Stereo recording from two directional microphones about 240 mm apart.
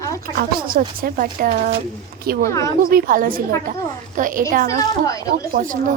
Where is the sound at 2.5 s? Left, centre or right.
Centre.